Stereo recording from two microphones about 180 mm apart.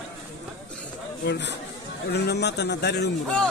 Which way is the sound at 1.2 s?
70° left (ahead or behind).